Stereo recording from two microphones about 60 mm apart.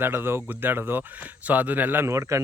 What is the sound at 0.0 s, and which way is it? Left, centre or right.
Speech, right.